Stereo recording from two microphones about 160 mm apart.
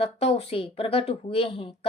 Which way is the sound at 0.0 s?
40° left (ahead or behind).